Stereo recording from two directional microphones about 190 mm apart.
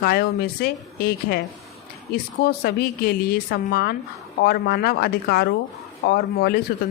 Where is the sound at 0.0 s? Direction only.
55° left (ahead or behind).